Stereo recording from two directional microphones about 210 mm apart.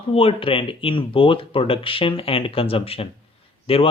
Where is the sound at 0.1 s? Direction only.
25° left (ahead or behind).